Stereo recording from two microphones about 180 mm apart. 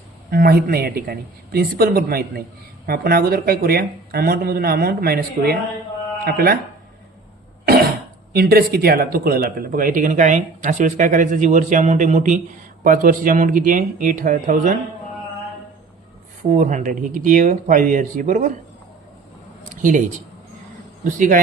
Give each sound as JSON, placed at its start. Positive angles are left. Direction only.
{"t": 0.3, "sound": "speech", "side_deg": -55}
{"t": 8.3, "sound": "speech", "side_deg": -60}
{"t": 16.5, "sound": "speech", "side_deg": -45}
{"t": 21.0, "sound": "speech", "side_deg": -45}